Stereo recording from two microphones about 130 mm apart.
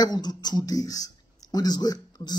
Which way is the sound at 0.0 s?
30° left (ahead or behind).